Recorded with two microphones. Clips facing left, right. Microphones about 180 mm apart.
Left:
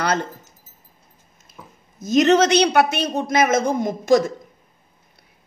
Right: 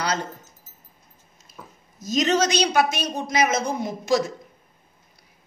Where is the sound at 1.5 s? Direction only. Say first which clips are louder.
Even; 55° left (ahead or behind).